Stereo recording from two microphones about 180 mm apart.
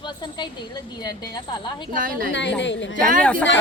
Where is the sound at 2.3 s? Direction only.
85° left.